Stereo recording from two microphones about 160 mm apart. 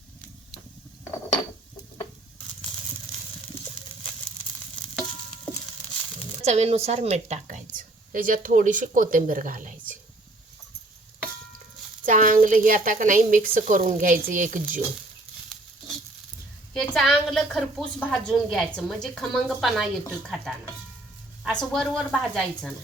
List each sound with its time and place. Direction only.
6.4 s a woman's voice: 45° right (ahead or behind)
12.0 s a woman's voice: 55° right (ahead or behind)
16.9 s a woman's voice: centre (ahead or behind)